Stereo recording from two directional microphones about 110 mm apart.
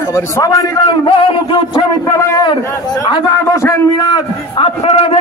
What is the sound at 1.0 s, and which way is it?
Speech, 45° left (ahead or behind).